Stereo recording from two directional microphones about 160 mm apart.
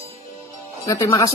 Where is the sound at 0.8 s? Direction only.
20° left (ahead or behind).